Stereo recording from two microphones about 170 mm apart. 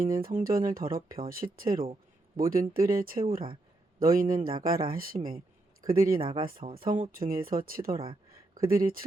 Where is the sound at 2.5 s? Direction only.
55° right (ahead or behind).